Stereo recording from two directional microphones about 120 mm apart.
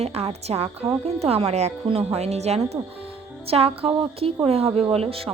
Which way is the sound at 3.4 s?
55° right (ahead or behind).